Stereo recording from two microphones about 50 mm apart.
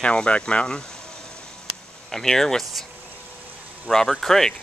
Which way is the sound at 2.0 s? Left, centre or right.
Centre.